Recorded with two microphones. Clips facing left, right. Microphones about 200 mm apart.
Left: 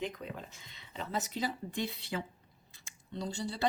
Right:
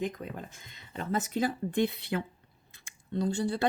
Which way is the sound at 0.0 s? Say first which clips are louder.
Right 4 dB; 50° right (ahead or behind).